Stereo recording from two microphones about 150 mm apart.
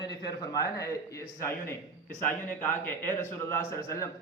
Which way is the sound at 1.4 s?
15° left (ahead or behind).